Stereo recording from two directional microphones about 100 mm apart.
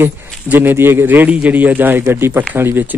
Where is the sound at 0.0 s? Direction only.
20° right (ahead or behind).